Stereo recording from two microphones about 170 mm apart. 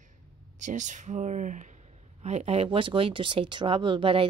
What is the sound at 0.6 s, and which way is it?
A woman's voice, 45° right (ahead or behind).